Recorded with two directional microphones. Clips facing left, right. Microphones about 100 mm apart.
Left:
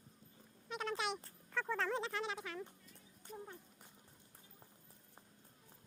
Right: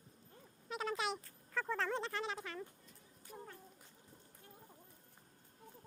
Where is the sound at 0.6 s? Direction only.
Centre (ahead or behind).